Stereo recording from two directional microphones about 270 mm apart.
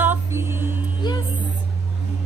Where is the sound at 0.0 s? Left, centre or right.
Centre.